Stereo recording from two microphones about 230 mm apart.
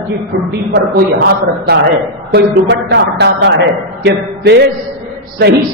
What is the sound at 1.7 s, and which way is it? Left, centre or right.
Speech, right.